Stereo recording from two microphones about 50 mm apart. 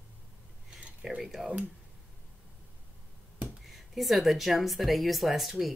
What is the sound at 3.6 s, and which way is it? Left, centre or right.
Speech, centre.